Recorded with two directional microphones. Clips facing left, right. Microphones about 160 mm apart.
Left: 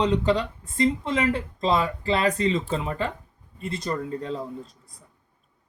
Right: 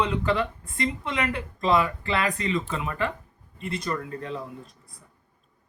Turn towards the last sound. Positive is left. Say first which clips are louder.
# left 2 dB
turn(degrees=25)  # may be behind; listen again after turning